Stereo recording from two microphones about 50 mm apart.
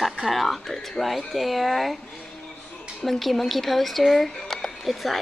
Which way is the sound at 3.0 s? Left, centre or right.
Centre.